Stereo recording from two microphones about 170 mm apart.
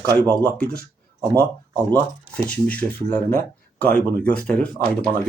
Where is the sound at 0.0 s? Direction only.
20° right (ahead or behind).